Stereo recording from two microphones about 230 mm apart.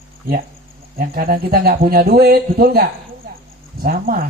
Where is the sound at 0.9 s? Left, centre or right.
Right.